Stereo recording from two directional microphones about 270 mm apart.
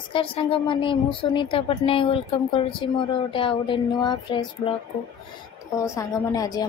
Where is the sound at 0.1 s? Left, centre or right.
Centre.